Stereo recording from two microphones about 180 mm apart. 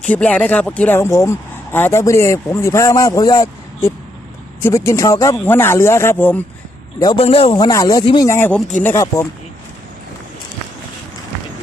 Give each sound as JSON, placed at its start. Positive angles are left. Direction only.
{"t": 0.0, "sound": "speech", "side_deg": 5}
{"t": 4.6, "sound": "speech", "side_deg": 15}
{"t": 7.0, "sound": "speech", "side_deg": 25}